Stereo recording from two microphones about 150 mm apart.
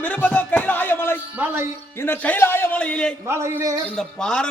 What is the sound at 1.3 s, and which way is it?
Music, 15° right (ahead or behind).